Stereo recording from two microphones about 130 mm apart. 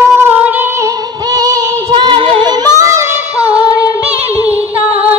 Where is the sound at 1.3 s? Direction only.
30° right (ahead or behind).